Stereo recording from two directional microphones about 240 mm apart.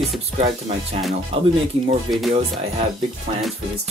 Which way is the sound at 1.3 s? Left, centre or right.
Right.